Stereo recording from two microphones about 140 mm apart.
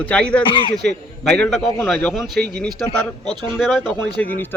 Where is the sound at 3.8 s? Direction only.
10° left (ahead or behind).